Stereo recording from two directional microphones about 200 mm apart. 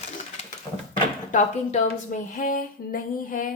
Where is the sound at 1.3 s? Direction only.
40° left (ahead or behind).